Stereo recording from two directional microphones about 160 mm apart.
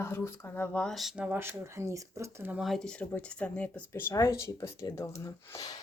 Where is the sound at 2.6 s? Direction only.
5° left (ahead or behind); by 5.8 s 25° left (ahead or behind).